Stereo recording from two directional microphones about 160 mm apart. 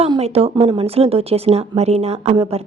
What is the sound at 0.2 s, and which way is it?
A woman's voice, 40° right (ahead or behind).